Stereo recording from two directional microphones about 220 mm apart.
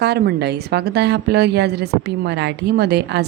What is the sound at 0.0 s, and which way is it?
A woman's voice, 50° right (ahead or behind).